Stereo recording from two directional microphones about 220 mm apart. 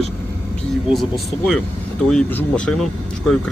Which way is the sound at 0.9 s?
Centre (ahead or behind).